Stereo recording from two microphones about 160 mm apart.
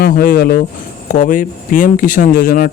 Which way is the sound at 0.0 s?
65° left (ahead or behind).